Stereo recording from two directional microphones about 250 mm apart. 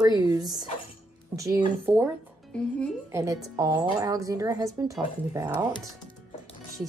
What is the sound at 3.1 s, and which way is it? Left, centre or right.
Speech, centre.